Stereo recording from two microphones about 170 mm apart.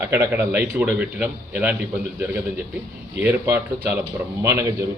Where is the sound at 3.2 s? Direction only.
15° right (ahead or behind).